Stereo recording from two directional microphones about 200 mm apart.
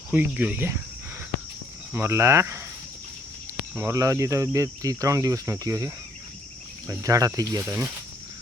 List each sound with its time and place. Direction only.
0.1 s speech: 10° right (ahead or behind)
1.9 s speech: 10° right (ahead or behind)
3.8 s speech: 15° right (ahead or behind)